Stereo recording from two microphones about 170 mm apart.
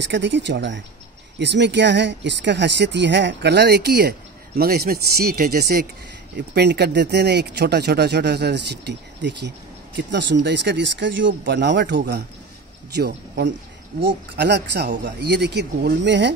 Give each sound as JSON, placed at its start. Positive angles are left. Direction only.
{"t": 0.0, "sound": "speech", "side_deg": -90}
{"t": 6.3, "sound": "speech", "side_deg": -80}
{"t": 12.9, "sound": "speech", "side_deg": -75}